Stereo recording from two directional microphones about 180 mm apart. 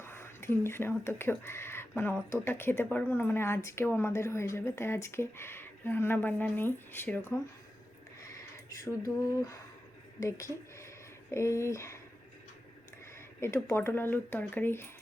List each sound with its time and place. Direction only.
0.0 s a woman's voice: 15° left (ahead or behind)
13.1 s speech: 15° left (ahead or behind)